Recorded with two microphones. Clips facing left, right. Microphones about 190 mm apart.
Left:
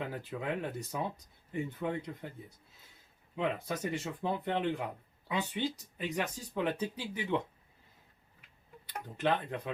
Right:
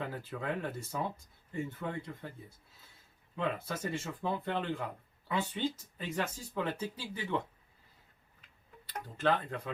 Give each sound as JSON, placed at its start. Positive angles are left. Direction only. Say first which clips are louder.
{"t": 0.0, "sound": "speech", "louder": "left 1 dB", "side_deg": 15}
{"t": 3.3, "sound": "speech", "louder": "left 2 dB", "side_deg": 15}
{"t": 8.9, "sound": "speech", "louder": "right 1 dB", "side_deg": 20}